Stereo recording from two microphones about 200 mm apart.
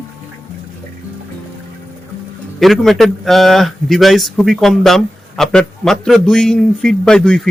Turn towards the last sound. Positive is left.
turn(degrees=5)  # may be behind; listen again after turning